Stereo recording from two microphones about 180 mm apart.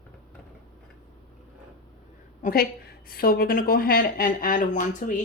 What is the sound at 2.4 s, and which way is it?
A woman's voice, 55° left (ahead or behind).